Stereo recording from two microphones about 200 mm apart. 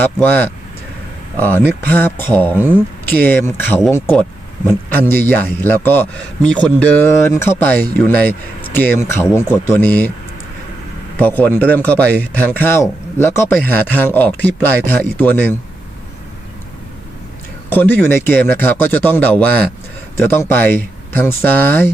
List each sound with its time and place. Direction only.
0.0 s speech: 10° left (ahead or behind)
11.2 s speech: 10° left (ahead or behind)
17.7 s speech: 10° left (ahead or behind)